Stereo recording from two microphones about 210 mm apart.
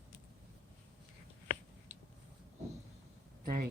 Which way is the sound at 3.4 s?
45° right (ahead or behind).